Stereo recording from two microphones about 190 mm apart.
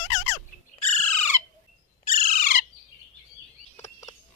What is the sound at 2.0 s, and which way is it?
Bird, 50° left (ahead or behind).